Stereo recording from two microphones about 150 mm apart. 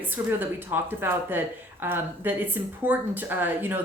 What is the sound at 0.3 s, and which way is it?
Speech, 15° right (ahead or behind).